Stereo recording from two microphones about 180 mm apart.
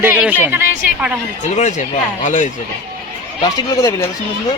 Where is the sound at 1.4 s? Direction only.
40° left (ahead or behind).